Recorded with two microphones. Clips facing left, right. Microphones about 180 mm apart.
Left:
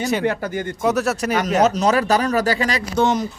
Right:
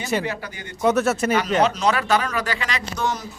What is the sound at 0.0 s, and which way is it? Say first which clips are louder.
Speech: left 3 dB; centre (ahead or behind).